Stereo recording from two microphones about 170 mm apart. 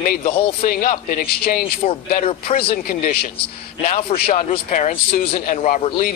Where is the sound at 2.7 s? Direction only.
60° left (ahead or behind).